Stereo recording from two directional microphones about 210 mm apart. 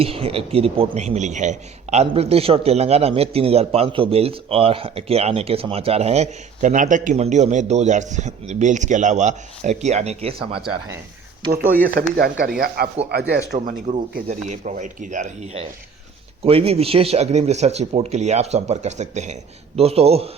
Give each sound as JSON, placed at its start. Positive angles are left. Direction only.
{"t": 0.0, "sound": "a man's voice", "side_deg": -25}
{"t": 12.0, "sound": "speech", "side_deg": -45}
{"t": 13.7, "sound": "a man's voice", "side_deg": -30}